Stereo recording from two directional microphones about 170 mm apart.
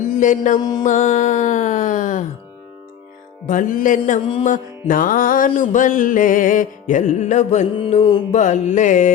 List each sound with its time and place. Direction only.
0.2 s music: 50° left (ahead or behind)
3.4 s music: 50° left (ahead or behind)